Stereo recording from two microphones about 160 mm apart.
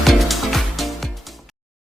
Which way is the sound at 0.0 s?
Centre (ahead or behind).